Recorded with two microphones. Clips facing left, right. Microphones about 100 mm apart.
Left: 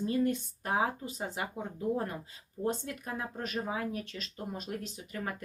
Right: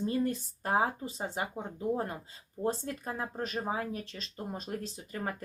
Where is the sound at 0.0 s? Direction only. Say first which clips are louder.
Left 1 dB; 35° right (ahead or behind).